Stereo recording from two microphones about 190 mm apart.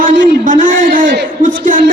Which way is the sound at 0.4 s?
45° right (ahead or behind).